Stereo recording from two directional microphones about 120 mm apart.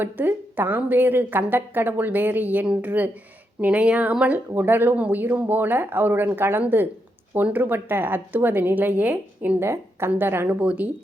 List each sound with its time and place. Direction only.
0.0 s a woman's voice: 15° right (ahead or behind)